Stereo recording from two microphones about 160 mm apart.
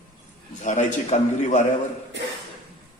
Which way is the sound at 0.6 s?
50° left (ahead or behind).